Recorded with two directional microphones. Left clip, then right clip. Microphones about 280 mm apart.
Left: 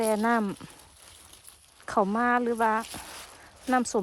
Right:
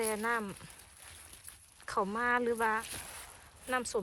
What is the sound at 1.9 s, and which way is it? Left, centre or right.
Speech, centre.